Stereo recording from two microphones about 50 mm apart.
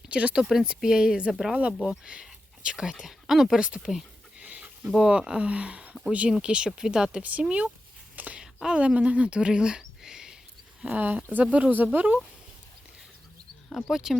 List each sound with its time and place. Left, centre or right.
0.1 s speech: right
0.3 s speech: centre
3.6 s speech: centre
4.4 s a sound: right
4.9 s speech: centre
6.7 s speech: centre
7.2 s speech: right
8.1 s a sound: right
8.6 s speech: right
10.8 s speech: right
13.9 s speech: centre